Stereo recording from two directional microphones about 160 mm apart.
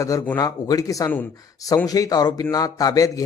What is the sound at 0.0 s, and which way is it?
A man's voice, 20° left (ahead or behind).